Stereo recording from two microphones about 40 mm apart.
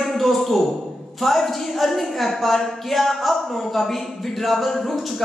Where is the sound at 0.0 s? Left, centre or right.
Centre.